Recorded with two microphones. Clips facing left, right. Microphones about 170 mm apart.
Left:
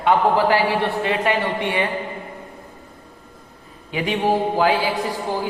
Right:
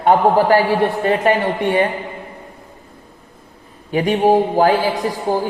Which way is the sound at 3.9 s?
45° right (ahead or behind).